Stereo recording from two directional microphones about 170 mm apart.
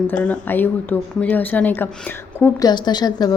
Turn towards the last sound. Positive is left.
turn(degrees=25)  # may be behind; listen again after turning